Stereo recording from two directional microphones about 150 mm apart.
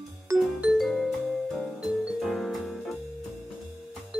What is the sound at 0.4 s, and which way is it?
Music, centre (ahead or behind).